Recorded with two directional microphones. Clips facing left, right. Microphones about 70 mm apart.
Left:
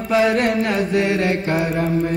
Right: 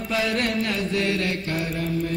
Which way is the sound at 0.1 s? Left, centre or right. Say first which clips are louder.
Left 8 dB; left.